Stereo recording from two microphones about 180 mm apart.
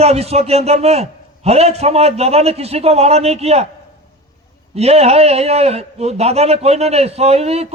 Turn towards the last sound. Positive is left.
turn(degrees=-35)  # may be behind; listen again after turning